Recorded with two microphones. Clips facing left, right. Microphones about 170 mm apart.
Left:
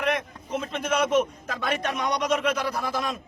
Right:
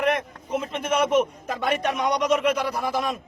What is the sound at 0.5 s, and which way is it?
A man's voice, 10° right (ahead or behind).